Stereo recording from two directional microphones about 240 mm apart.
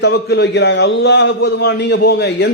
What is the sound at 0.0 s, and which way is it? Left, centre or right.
A man's voice, left.